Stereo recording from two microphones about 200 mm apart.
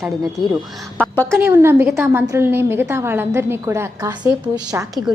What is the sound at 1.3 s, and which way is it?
A woman's voice, 15° right (ahead or behind).